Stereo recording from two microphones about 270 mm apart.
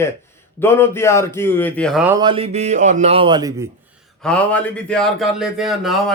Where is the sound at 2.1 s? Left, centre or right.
Centre.